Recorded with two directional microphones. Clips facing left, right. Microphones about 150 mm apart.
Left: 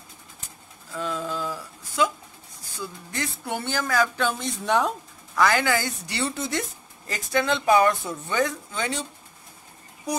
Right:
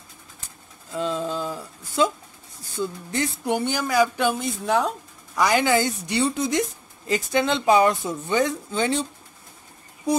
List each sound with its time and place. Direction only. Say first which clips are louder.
0.9 s a sound: right 4 dB; 25° right (ahead or behind)
2.8 s speech: right 6 dB; 20° right (ahead or behind); by 4.9 s centre (ahead or behind)
5.3 s speech: right 2 dB; 15° right (ahead or behind)